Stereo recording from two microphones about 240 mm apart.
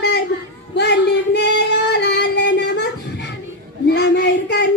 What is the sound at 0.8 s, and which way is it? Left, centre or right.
Female singing, left.